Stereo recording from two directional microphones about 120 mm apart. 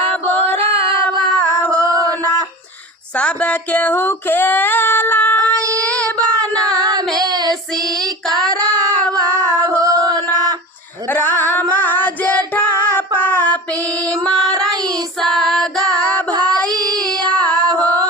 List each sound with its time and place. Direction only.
1.9 s a sound: 30° right (ahead or behind)
3.2 s female singing: 10° left (ahead or behind)
6.7 s child singing: 35° right (ahead or behind)
9.4 s a sound: 30° right (ahead or behind)
11.1 s singing: 15° left (ahead or behind)
11.7 s child singing: 15° left (ahead or behind)
12.4 s child singing: 30° right (ahead or behind)
13.1 s child singing: 15° left (ahead or behind)
15.2 s female singing: 5° left (ahead or behind)
16.3 s child singing: 35° right (ahead or behind)
17.3 s female singing: 10° left (ahead or behind)
17.6 s singing: 35° right (ahead or behind)